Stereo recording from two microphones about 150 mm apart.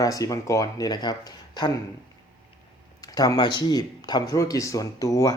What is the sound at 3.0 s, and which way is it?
Speech, 25° left (ahead or behind).